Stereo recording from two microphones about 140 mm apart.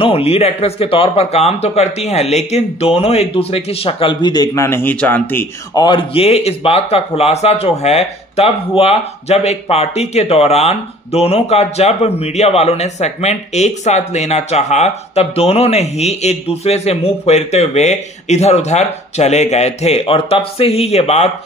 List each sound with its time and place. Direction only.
0.0 s speech: 45° left (ahead or behind); by 5.5 s 15° left (ahead or behind)
5.8 s speech: 35° left (ahead or behind)